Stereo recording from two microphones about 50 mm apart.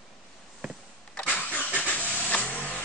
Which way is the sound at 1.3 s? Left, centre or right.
Left.